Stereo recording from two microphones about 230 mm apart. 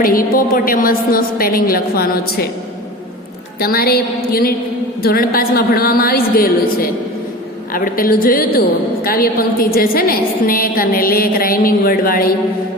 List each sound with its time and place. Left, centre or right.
0.0 s a woman's voice: left
3.6 s a woman's voice: left